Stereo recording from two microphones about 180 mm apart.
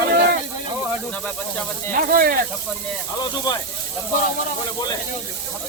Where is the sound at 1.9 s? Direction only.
55° right (ahead or behind).